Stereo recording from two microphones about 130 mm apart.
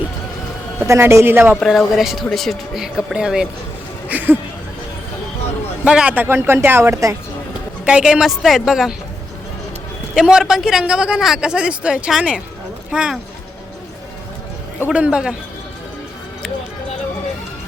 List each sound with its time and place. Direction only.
0.8 s a man's voice: 20° right (ahead or behind)
1.5 s a man's voice: centre (ahead or behind)
5.8 s a man's voice: 5° right (ahead or behind); by 7.2 s 20° right (ahead or behind)
7.9 s speech: 5° right (ahead or behind)
10.2 s a man's voice: 5° right (ahead or behind)
14.8 s a man's voice: 10° right (ahead or behind)